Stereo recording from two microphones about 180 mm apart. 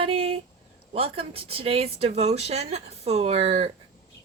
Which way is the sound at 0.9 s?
30° right (ahead or behind).